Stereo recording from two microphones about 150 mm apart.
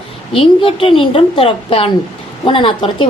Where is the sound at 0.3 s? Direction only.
35° left (ahead or behind).